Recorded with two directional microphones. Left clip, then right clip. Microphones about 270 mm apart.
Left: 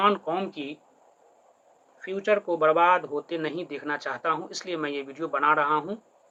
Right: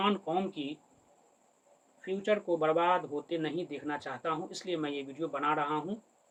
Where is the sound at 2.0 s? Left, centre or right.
Centre.